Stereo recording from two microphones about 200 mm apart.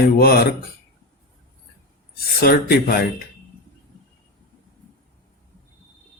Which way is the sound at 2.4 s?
50° left (ahead or behind).